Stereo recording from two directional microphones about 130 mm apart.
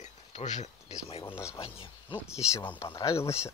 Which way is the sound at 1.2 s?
20° left (ahead or behind).